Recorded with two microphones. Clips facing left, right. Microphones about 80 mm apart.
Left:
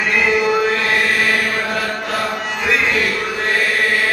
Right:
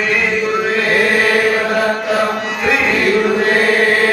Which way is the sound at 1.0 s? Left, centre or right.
Right.